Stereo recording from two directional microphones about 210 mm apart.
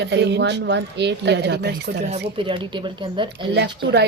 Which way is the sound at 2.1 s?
25° right (ahead or behind).